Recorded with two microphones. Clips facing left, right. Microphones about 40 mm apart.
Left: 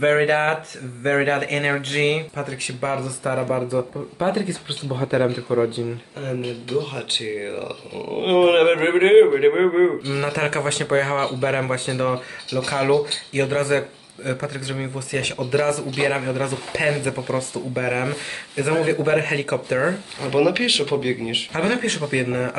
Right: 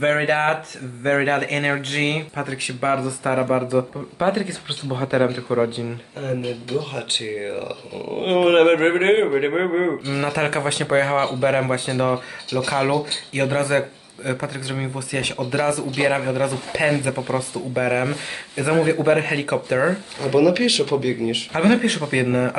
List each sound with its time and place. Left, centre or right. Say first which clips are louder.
0.0 s speech: left 1 dB; centre
2.3 s speech: right 2 dB; centre
3.3 s speech: right 2 dB; right
4.2 s speech: right 1 dB; right
6.2 s speech: right 2 dB; centre
20.2 s speech: right 2 dB; centre
21.5 s speech: right 5 dB; centre